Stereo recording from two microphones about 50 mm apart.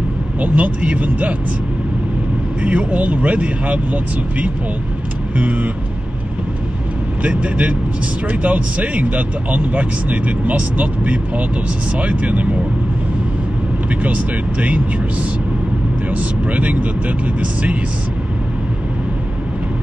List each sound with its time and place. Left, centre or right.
0.4 s speech: right
2.6 s speech: right
7.2 s speech: right
14.0 s speech: right
16.1 s speech: right